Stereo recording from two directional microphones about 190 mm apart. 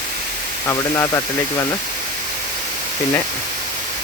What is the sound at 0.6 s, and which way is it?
Speech, 15° left (ahead or behind).